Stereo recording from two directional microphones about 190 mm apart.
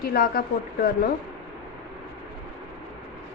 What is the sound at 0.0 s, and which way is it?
Speech, 50° left (ahead or behind).